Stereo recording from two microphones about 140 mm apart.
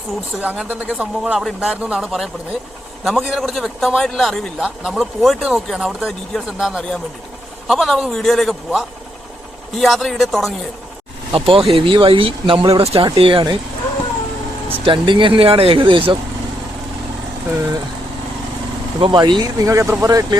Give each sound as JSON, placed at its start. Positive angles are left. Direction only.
{"t": 0.5, "sound": "a man's voice", "side_deg": -5}
{"t": 11.3, "sound": "speech", "side_deg": -40}
{"t": 14.8, "sound": "speech", "side_deg": -35}
{"t": 17.5, "sound": "speech", "side_deg": -15}
{"t": 18.9, "sound": "speech", "side_deg": -30}